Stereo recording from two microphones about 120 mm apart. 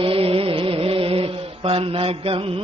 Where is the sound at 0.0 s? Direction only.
50° right (ahead or behind).